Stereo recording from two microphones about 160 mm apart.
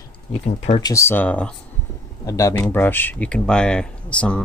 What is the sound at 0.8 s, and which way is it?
Speech, 20° left (ahead or behind).